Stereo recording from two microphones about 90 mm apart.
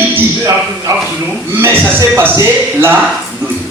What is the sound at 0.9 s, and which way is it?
Speech, 40° right (ahead or behind).